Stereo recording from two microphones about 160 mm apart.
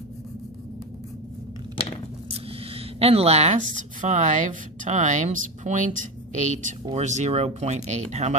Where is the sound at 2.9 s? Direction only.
40° right (ahead or behind).